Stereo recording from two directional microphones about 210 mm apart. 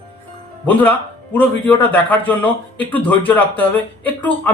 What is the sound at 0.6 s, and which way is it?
A man's voice, 10° left (ahead or behind).